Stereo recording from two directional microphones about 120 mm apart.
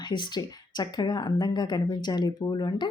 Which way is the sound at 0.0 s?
40° left (ahead or behind).